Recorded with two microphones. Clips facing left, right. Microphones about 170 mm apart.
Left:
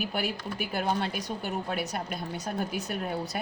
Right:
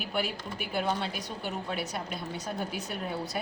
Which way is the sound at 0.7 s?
45° left (ahead or behind).